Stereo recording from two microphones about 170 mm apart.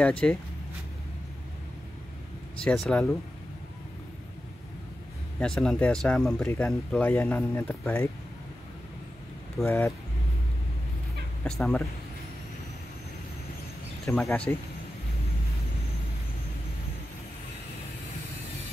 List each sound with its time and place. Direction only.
0.0 s speech: 5° left (ahead or behind)
2.6 s speech: 5° left (ahead or behind)
5.4 s speech: 5° left (ahead or behind)
6.4 s speech: 15° left (ahead or behind)
9.7 s speech: 15° left (ahead or behind)
11.4 s speech: 5° left (ahead or behind)
14.0 s speech: 5° left (ahead or behind)